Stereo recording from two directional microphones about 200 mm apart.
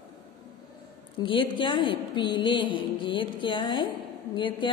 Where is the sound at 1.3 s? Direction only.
25° left (ahead or behind).